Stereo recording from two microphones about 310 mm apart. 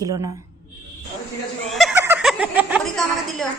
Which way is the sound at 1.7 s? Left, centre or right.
Centre.